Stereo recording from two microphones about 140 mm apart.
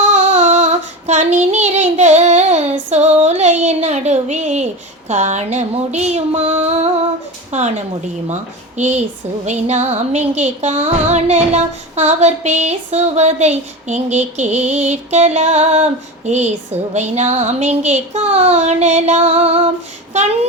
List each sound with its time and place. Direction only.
0.1 s female singing: 55° right (ahead or behind)
1.3 s child singing: 55° right (ahead or behind)
5.0 s a sound: 55° right (ahead or behind)
7.5 s a woman's voice: 55° right (ahead or behind)
9.5 s child singing: 55° right (ahead or behind)
18.3 s a sound: 50° right (ahead or behind)